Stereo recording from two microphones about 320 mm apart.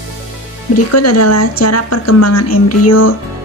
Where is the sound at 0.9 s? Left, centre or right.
Left.